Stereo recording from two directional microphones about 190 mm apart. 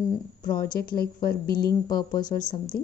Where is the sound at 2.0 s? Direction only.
20° left (ahead or behind).